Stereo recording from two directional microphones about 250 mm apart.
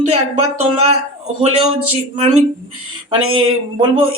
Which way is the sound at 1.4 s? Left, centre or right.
Right.